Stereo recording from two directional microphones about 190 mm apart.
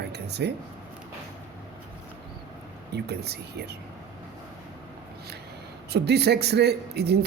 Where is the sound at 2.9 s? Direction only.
60° right (ahead or behind).